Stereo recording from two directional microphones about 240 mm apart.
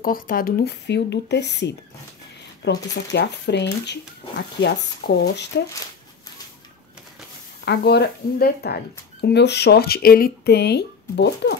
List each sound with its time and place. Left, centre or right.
0.0 s speech: left
7.6 s speech: left